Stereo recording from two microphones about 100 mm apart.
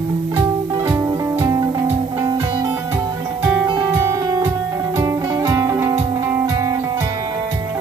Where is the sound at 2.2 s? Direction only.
45° right (ahead or behind).